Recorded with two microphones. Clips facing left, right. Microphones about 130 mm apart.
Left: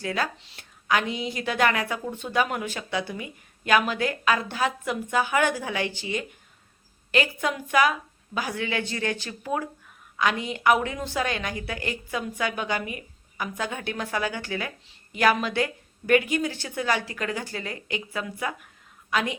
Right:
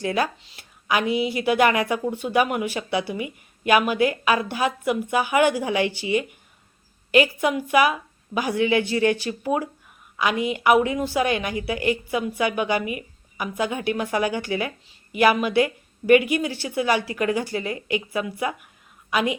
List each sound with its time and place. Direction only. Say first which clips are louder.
0.0 s a woman's voice: right 5 dB; 15° right (ahead or behind)